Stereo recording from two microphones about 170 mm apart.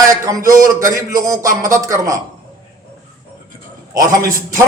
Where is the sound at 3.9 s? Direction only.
20° right (ahead or behind).